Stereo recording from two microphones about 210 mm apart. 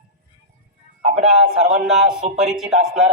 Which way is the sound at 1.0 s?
30° right (ahead or behind).